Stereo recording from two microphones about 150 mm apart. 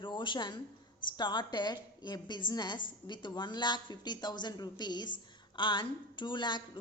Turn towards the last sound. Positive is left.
turn(degrees=30)  # may be behind; listen again after turning